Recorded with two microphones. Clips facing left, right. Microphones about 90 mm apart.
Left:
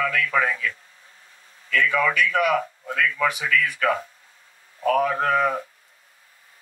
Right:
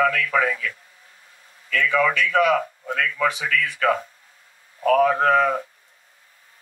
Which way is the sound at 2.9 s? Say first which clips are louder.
Left 1 dB; 50° right (ahead or behind).